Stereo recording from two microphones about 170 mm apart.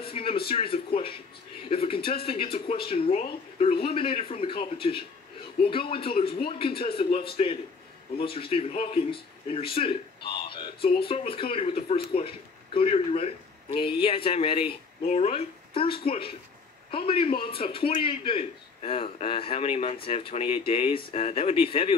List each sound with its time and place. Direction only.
0.0 s a man's voice: 35° left (ahead or behind)
8.2 s a man's voice: 35° left (ahead or behind)